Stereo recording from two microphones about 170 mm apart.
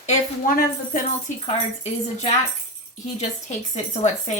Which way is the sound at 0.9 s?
50° left (ahead or behind).